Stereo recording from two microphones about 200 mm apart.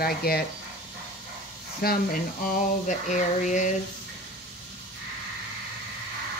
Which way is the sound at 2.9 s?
40° left (ahead or behind).